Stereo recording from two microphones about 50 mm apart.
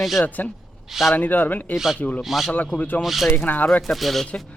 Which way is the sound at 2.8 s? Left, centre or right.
Left.